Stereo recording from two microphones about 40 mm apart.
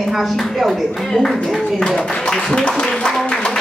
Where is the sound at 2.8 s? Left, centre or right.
Left.